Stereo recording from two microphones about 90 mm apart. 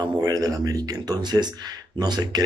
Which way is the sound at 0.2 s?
40° right (ahead or behind).